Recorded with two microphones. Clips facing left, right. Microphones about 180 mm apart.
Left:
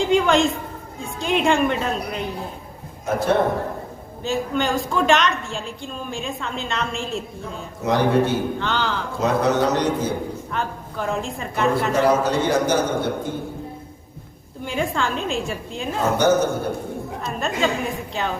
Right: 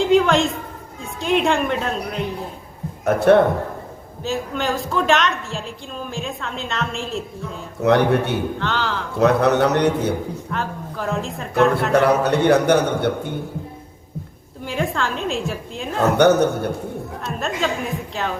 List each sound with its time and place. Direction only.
0.0 s a woman's voice: centre (ahead or behind)
3.0 s a man's voice: 65° right (ahead or behind)
4.2 s a woman's voice: centre (ahead or behind)
7.8 s a man's voice: 65° right (ahead or behind)
8.5 s a woman's voice: centre (ahead or behind)
9.1 s a man's voice: 65° right (ahead or behind)
10.5 s a woman's voice: centre (ahead or behind)
11.9 s a man's voice: 65° right (ahead or behind)
14.6 s a woman's voice: centre (ahead or behind)
16.0 s a man's voice: 65° right (ahead or behind)
17.2 s a woman's voice: centre (ahead or behind)